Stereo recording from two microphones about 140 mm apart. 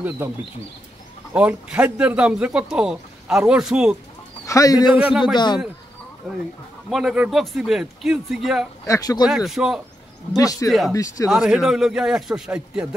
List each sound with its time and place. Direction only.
0.2 s a man's voice: 15° right (ahead or behind)
4.5 s speech: 25° left (ahead or behind)
4.9 s speech: 10° right (ahead or behind)
5.2 s speech: 30° left (ahead or behind)
6.9 s a man's voice: 5° right (ahead or behind)
8.8 s speech: 25° left (ahead or behind)
9.3 s a man's voice: 5° right (ahead or behind)
10.3 s speech: 25° left (ahead or behind)
11.2 s a man's voice: 5° right (ahead or behind)